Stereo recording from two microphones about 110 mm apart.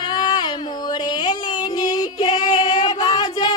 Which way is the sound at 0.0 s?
40° left (ahead or behind).